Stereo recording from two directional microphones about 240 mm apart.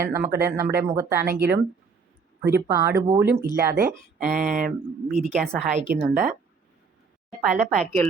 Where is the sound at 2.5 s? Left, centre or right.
Centre.